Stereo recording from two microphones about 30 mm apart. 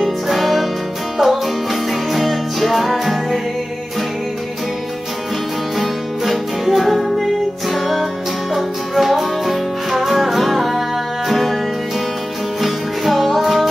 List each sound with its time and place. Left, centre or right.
0.0 s music: centre
5.8 s music: centre
12.6 s music: centre